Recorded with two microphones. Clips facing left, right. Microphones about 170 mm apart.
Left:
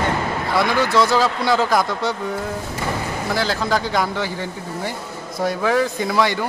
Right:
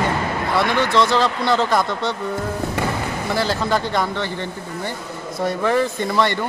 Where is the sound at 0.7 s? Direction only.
5° left (ahead or behind).